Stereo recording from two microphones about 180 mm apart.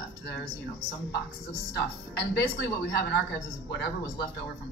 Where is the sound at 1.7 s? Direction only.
70° left (ahead or behind).